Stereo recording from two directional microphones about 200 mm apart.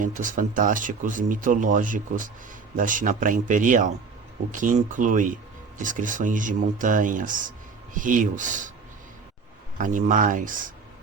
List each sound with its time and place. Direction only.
0.0 s speech: 40° right (ahead or behind)
9.7 s speech: 40° right (ahead or behind)